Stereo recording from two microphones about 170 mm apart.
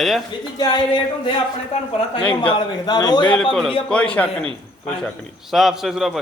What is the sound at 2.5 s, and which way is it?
Speech, 25° left (ahead or behind).